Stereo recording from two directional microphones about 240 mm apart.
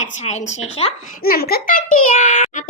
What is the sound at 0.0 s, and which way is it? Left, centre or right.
Speech, left.